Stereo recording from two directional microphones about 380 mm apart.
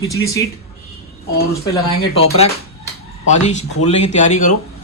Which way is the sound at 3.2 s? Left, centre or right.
Centre.